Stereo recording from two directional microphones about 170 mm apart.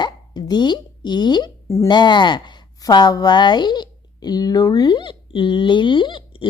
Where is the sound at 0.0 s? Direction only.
25° left (ahead or behind).